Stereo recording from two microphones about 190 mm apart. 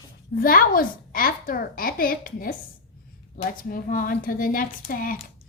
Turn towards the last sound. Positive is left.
turn(degrees=45)  # may be behind; listen again after turning